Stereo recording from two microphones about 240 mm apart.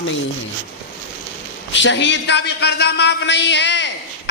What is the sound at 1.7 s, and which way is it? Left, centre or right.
A man's voice, left.